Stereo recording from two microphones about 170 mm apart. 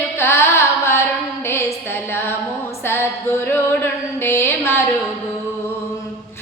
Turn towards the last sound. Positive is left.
turn(degrees=15)  # may be behind; listen again after turning